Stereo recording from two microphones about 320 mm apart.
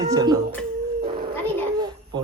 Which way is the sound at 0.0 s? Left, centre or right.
Centre.